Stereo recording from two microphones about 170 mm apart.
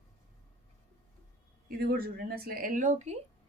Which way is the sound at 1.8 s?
60° right (ahead or behind).